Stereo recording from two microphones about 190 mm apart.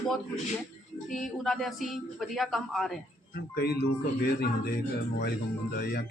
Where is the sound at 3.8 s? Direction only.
55° left (ahead or behind).